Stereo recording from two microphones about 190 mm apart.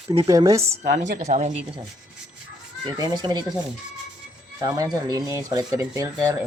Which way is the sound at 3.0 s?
20° right (ahead or behind).